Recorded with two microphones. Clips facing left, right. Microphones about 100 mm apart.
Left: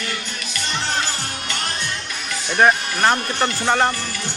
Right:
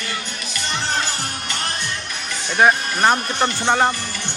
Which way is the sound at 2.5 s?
5° right (ahead or behind).